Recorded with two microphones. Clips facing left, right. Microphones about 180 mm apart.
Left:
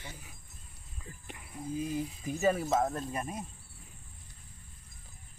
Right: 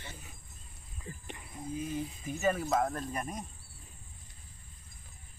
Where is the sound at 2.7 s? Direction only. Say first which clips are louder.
Left 1 dB; 5° left (ahead or behind).